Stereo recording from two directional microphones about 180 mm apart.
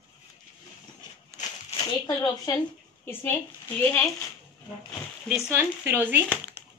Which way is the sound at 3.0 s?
10° left (ahead or behind).